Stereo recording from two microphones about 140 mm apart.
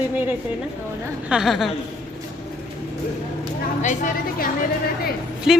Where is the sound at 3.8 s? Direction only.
65° left (ahead or behind).